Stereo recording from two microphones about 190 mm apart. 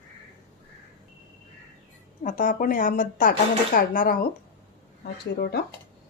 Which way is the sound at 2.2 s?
45° left (ahead or behind).